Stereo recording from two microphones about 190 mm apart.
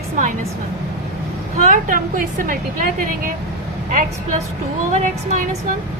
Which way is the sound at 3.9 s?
45° right (ahead or behind).